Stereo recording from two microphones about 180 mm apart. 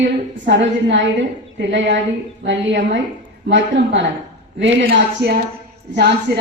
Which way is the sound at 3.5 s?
85° right.